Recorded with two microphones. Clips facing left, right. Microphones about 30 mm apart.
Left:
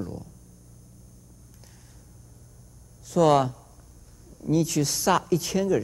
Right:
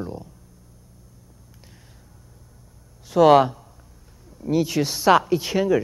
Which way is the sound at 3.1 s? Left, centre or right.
Right.